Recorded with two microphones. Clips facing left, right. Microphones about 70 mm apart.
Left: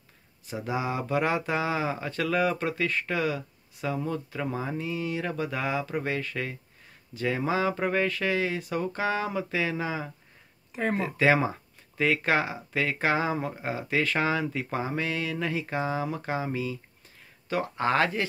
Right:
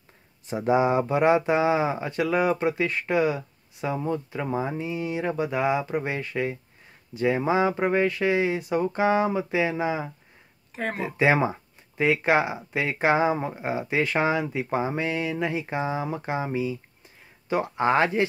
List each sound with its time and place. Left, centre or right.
0.5 s speech: right
10.7 s speech: centre
11.0 s speech: centre